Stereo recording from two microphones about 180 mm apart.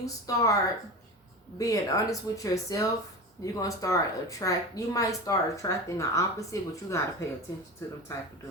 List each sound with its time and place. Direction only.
0.0 s speech: 20° left (ahead or behind)
1.5 s a woman's voice: 20° left (ahead or behind)